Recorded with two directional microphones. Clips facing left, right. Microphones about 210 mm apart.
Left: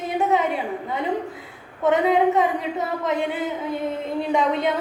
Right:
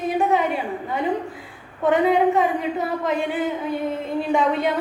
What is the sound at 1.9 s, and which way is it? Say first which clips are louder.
A woman's voice: right 1 dB; 20° left (ahead or behind).